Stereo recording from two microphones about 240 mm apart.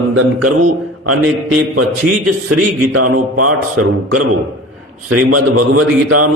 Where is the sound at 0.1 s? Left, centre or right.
Right.